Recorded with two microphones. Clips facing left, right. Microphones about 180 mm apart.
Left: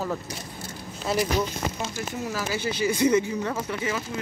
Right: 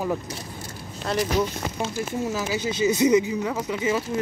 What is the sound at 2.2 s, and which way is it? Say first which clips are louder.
Speech: even; 20° right (ahead or behind).